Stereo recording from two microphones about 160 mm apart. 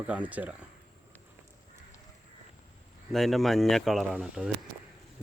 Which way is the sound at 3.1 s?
Centre (ahead or behind).